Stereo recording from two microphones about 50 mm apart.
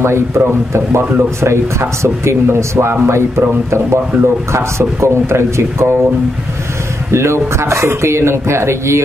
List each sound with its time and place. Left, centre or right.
0.0 s a man's voice: right
7.1 s a man's voice: right